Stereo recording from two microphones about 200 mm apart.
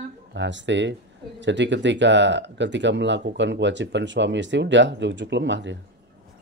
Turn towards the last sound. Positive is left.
turn(degrees=-65)  # may be behind; listen again after turning